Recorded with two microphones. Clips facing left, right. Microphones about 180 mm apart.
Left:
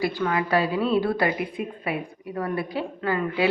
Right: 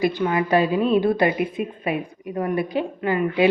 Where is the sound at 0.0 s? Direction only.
20° right (ahead or behind).